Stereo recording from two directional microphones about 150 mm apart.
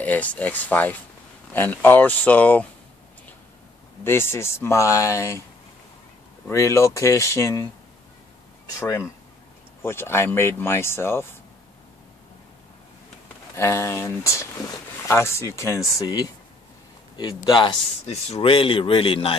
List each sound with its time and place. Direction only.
0.0 s speech: 10° left (ahead or behind)
4.0 s speech: 15° left (ahead or behind)
6.5 s speech: 20° left (ahead or behind)
8.7 s speech: 20° left (ahead or behind)
13.6 s speech: 20° left (ahead or behind); by 19.3 s 35° left (ahead or behind)